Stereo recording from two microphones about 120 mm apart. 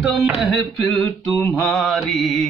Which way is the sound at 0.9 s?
20° left (ahead or behind).